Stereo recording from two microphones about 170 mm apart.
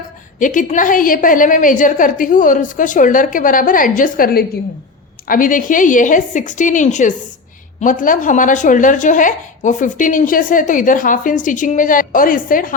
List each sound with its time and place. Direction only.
0.3 s a woman's voice: 50° left (ahead or behind)